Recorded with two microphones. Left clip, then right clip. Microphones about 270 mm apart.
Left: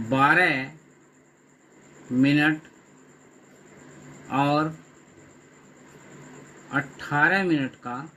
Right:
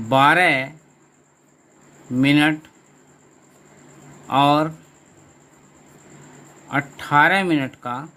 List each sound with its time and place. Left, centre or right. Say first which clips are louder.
0.1 s speech: right 5 dB; right
2.2 s speech: right 4 dB; right
4.3 s speech: right 7 dB; right
6.7 s speech: right 6 dB; right